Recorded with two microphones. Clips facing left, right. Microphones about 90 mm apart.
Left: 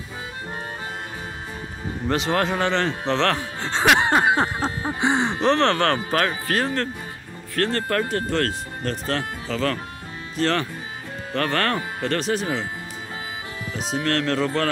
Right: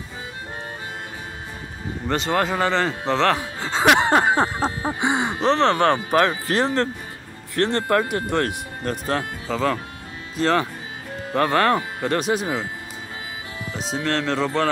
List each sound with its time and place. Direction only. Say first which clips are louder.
2.0 s speech: even; centre (ahead or behind)
4.1 s music: right 1 dB; 25° right (ahead or behind)
5.1 s gasp: left 1 dB; 10° right (ahead or behind)
5.5 s speech: right 1 dB; 5° right (ahead or behind)
5.8 s speech: right 3 dB; 20° right (ahead or behind)
14.0 s speech: even; centre (ahead or behind)